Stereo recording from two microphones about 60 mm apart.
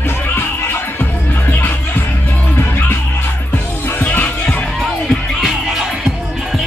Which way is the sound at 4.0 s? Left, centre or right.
Left.